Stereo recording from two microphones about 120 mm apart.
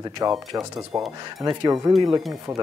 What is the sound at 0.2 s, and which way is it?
Speech, 25° right (ahead or behind).